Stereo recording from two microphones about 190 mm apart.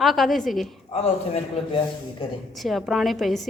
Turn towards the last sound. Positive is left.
turn(degrees=0)  # may be behind; listen again after turning